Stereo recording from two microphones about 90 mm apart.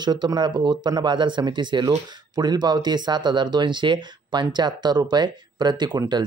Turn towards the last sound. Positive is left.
turn(degrees=-55)  # may be behind; listen again after turning